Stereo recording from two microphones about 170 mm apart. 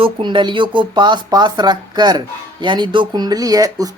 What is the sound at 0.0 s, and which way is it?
Speech, 30° right (ahead or behind).